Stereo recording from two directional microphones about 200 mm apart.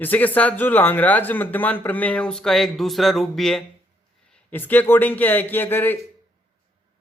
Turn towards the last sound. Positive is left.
turn(degrees=10)  # may be behind; listen again after turning